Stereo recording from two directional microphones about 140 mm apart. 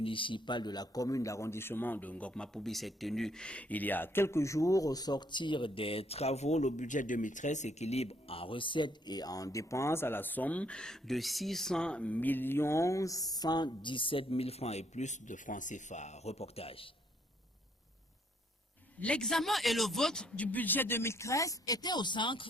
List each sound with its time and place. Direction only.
0.0 s a man's voice: 40° left (ahead or behind)
18.9 s speech: 10° left (ahead or behind); by 22.4 s 35° left (ahead or behind)